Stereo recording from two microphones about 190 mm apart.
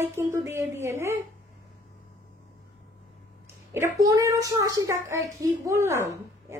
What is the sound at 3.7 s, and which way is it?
A woman's voice, 15° right (ahead or behind).